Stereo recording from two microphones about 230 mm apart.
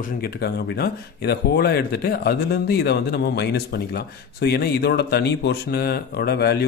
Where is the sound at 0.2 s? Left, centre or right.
Left.